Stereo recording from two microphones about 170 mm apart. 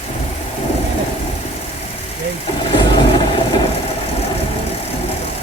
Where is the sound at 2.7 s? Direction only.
30° left (ahead or behind).